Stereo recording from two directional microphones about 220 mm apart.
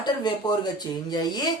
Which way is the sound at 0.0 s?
20° left (ahead or behind).